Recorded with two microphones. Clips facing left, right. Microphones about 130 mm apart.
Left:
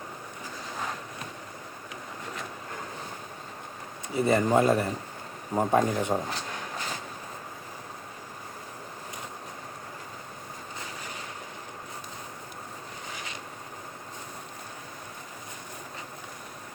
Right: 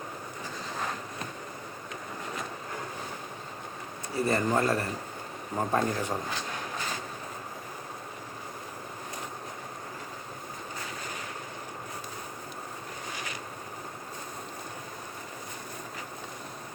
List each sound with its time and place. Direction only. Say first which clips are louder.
4.1 s speech: left 4 dB; 20° left (ahead or behind)